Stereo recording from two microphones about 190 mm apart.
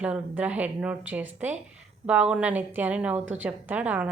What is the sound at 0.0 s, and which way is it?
Speech, 5° right (ahead or behind).